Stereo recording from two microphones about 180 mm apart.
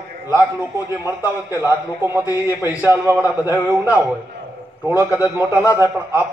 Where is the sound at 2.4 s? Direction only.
20° left (ahead or behind).